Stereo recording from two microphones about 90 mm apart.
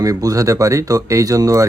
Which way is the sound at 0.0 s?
40° right (ahead or behind).